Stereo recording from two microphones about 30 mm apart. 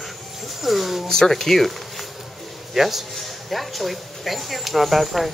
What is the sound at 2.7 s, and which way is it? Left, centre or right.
Speech, centre.